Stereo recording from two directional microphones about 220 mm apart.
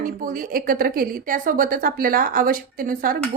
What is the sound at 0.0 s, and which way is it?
A woman's voice, 40° right (ahead or behind).